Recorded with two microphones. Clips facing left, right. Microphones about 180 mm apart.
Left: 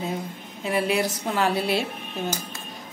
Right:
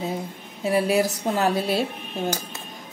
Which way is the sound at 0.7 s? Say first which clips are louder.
Right 3 dB; 40° right (ahead or behind).